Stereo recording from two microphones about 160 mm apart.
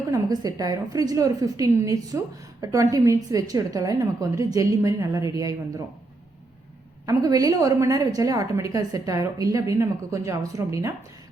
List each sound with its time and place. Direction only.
0.1 s a woman's voice: 20° right (ahead or behind)
7.0 s a woman's voice: 20° right (ahead or behind)